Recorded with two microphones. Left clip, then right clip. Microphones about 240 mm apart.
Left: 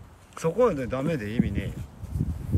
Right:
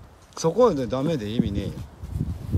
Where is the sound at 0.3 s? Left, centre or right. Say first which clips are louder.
Right 4 dB; centre.